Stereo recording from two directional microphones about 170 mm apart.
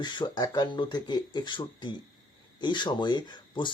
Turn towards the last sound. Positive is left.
turn(degrees=25)  # may be behind; listen again after turning